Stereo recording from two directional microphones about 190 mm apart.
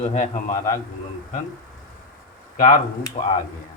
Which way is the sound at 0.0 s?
35° left (ahead or behind).